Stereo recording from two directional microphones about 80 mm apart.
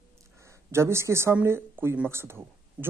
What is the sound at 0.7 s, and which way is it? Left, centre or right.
Speech, right.